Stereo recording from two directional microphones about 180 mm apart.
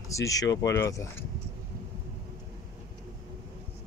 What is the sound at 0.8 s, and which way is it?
Speech, 15° left (ahead or behind).